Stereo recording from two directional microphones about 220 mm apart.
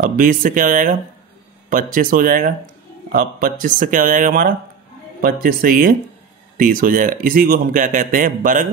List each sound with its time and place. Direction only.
0.0 s a man's voice: 40° right (ahead or behind)